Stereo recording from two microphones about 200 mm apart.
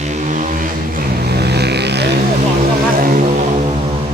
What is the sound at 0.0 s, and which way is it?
Vehicle, 35° right (ahead or behind).